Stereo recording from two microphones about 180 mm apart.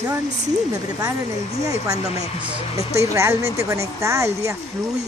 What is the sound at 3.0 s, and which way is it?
Speech, 15° right (ahead or behind).